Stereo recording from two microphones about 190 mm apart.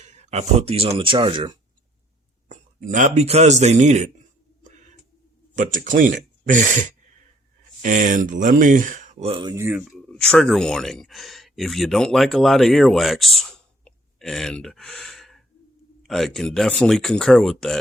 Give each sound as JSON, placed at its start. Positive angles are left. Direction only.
{"t": 0.0, "sound": "speech", "side_deg": -35}
{"t": 2.5, "sound": "a man's voice", "side_deg": -40}
{"t": 5.5, "sound": "speech", "side_deg": -45}
{"t": 10.1, "sound": "speech", "side_deg": 5}
{"t": 13.8, "sound": "a sound", "side_deg": 0}
{"t": 16.0, "sound": "speech", "side_deg": 0}